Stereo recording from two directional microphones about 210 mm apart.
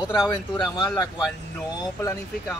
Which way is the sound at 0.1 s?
20° left (ahead or behind).